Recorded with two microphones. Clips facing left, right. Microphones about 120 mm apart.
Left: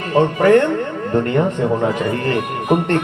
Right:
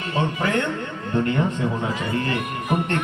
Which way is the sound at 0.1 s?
45° left (ahead or behind).